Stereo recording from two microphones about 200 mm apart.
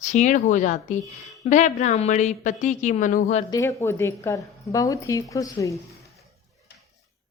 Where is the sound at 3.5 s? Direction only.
15° left (ahead or behind).